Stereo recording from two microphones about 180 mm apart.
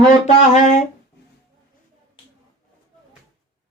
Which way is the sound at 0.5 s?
40° left (ahead or behind).